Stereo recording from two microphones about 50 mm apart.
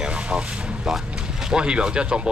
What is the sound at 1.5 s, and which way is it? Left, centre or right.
Speech, centre.